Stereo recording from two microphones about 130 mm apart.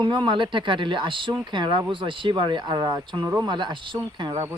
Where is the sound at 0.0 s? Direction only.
35° right (ahead or behind).